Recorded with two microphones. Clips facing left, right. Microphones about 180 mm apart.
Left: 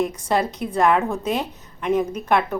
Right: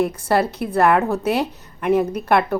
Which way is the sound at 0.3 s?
5° right (ahead or behind).